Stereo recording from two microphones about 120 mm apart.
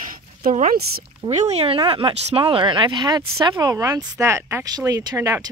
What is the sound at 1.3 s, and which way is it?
Speech, 75° right (ahead or behind).